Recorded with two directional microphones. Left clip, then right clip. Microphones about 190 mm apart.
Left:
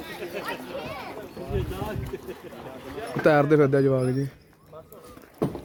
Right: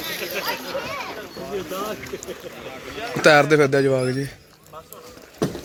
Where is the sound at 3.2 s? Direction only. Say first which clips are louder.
Right 5 dB; 15° left (ahead or behind).